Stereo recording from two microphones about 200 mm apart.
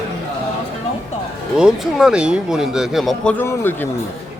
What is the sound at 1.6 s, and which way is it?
Speech, centre (ahead or behind).